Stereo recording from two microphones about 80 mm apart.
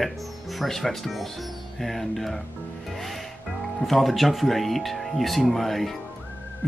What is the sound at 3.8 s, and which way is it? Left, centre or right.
Speech, centre.